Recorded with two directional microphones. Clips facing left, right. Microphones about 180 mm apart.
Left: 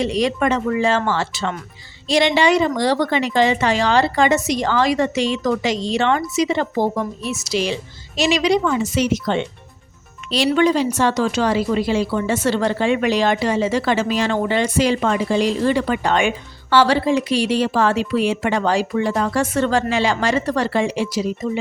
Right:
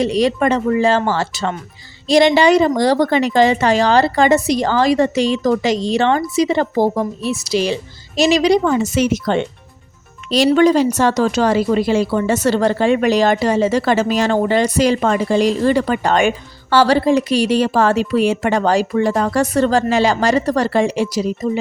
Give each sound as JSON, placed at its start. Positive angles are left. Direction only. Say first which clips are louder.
{"t": 0.0, "sound": "a woman's voice", "louder": "right 3 dB", "side_deg": -35}